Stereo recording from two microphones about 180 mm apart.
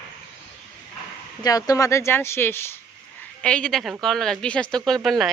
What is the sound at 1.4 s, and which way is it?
Speech, 20° left (ahead or behind).